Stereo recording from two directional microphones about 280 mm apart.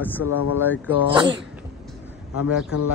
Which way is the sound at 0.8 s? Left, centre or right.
Centre.